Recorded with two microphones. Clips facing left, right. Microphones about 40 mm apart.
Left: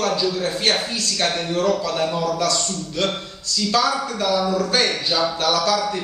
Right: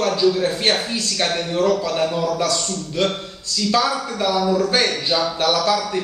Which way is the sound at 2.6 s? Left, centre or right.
Centre.